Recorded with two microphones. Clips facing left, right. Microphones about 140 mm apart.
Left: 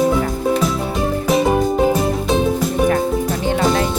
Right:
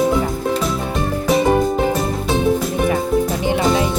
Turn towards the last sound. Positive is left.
turn(degrees=0)  # may be behind; listen again after turning